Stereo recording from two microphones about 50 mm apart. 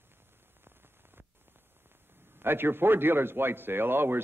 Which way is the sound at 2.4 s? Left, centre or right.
Right.